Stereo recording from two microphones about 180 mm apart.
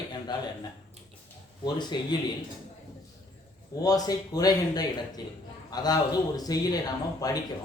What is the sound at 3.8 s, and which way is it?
Speech, 20° left (ahead or behind).